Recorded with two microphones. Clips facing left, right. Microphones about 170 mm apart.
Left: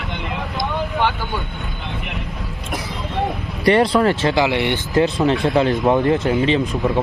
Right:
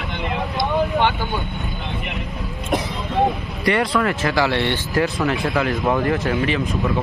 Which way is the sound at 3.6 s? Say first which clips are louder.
Left 5 dB; 30° left (ahead or behind).